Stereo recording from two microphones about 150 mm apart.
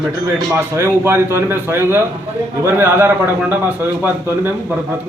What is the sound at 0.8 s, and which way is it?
A man's voice, 15° right (ahead or behind).